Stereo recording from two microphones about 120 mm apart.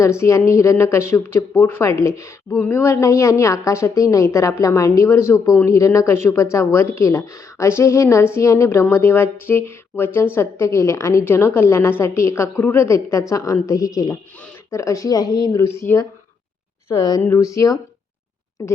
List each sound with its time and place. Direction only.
0.0 s speech: 25° left (ahead or behind)
16.9 s speech: 35° left (ahead or behind)